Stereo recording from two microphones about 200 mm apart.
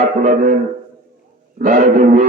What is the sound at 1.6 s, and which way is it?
Speech, 40° right (ahead or behind).